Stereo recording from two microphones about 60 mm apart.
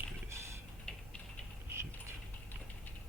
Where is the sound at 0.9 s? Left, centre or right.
Centre.